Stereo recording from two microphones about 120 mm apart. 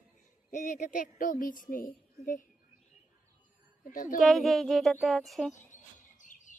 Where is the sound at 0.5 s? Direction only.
90° left.